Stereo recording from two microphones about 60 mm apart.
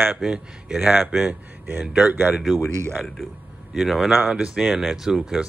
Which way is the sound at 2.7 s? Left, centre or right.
Right.